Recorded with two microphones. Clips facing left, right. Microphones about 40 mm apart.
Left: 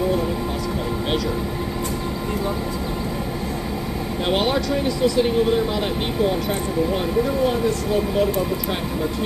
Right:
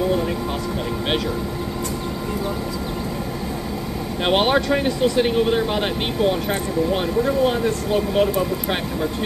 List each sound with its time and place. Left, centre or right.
4.2 s speech: right
7.4 s speech: right